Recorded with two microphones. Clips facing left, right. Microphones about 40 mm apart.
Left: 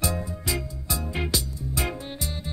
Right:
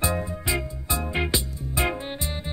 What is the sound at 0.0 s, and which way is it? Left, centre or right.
Music, right.